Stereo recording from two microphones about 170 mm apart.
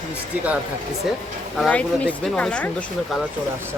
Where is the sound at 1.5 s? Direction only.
5° left (ahead or behind).